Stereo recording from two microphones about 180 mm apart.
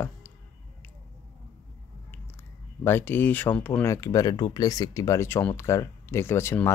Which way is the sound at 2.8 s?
10° left (ahead or behind).